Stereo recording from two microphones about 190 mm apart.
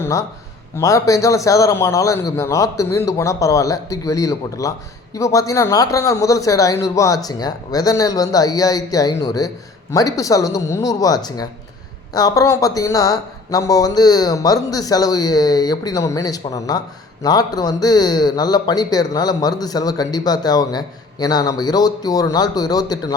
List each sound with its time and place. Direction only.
0.0 s a man's voice: 15° left (ahead or behind)